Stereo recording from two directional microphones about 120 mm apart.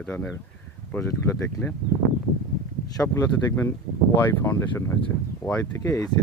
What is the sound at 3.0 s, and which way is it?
Speech, 20° left (ahead or behind).